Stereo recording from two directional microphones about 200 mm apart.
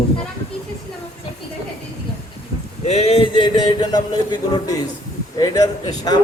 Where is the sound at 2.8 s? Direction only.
30° left (ahead or behind).